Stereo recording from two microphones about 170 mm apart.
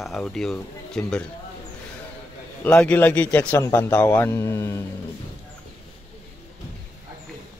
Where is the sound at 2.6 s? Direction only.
5° left (ahead or behind).